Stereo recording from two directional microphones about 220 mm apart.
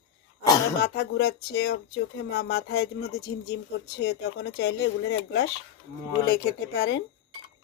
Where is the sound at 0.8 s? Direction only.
50° left (ahead or behind).